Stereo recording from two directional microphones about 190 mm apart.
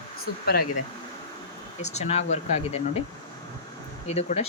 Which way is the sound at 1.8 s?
35° left (ahead or behind).